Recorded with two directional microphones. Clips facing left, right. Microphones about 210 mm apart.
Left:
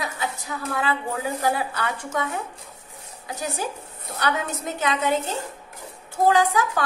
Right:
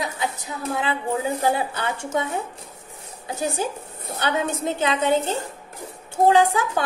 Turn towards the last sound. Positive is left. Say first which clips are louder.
# right 2 dB
turn(degrees=-25)  # may be behind; listen again after turning